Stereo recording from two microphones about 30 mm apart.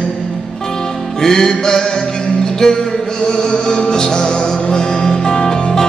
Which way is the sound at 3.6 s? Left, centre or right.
Left.